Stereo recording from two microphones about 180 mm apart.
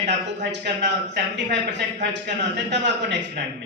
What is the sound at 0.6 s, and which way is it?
Speech, 70° right (ahead or behind).